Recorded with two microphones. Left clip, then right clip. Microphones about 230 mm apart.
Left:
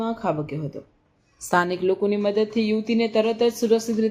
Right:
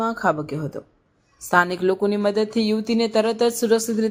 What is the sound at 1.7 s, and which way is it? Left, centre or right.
Speech, centre.